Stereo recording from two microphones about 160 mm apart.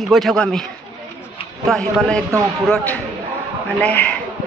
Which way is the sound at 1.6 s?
Centre (ahead or behind).